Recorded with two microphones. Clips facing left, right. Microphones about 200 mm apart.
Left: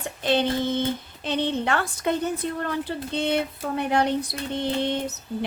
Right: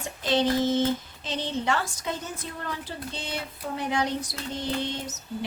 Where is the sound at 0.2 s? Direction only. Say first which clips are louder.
Left 1 dB; 60° left (ahead or behind).